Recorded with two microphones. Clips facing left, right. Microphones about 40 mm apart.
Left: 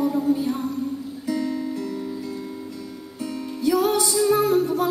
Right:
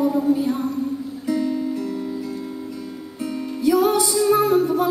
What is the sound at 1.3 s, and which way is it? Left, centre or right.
Music, right.